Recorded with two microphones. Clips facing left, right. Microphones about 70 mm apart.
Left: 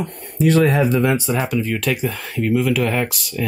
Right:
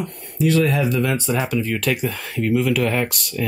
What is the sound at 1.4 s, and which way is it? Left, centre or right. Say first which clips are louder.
Speech: left 1 dB; centre.